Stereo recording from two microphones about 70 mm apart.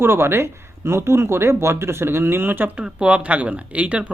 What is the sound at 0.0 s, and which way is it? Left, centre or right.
Speech, right.